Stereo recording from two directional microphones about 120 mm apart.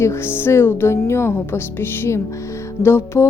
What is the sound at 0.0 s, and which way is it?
Speech, 20° left (ahead or behind).